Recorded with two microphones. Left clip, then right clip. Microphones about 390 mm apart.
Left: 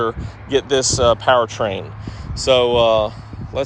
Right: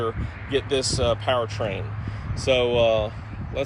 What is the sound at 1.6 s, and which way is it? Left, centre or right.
Speech, centre.